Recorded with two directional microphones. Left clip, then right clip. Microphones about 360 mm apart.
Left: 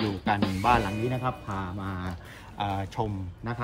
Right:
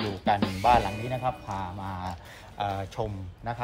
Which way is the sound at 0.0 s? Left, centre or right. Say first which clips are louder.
Right 1 dB; centre.